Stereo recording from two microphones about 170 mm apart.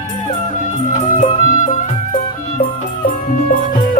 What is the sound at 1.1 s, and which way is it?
Music, 50° left (ahead or behind).